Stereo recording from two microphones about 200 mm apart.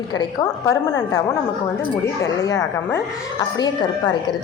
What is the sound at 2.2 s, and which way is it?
A woman's voice, 15° left (ahead or behind).